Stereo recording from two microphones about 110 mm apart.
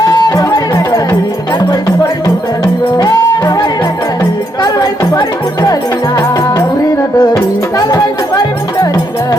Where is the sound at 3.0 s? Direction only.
35° left (ahead or behind).